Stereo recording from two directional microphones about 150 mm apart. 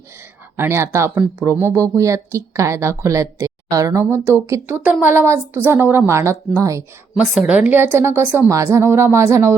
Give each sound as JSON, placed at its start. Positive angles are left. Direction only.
{"t": 0.5, "sound": "a woman's voice", "side_deg": -15}
{"t": 7.3, "sound": "a woman's voice", "side_deg": -5}